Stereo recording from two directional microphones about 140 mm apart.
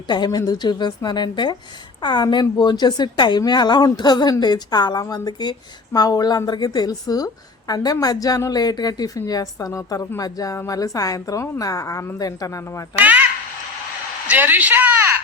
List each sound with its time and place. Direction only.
0.1 s a woman's voice: 30° left (ahead or behind)
13.0 s speech: 10° right (ahead or behind)
14.3 s speech: 15° right (ahead or behind)